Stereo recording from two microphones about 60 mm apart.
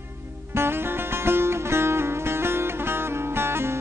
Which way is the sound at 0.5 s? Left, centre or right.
Right.